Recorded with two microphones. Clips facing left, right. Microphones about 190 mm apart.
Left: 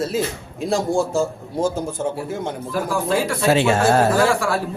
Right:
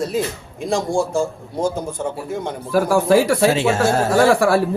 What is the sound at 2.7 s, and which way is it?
A man's voice, 75° right (ahead or behind).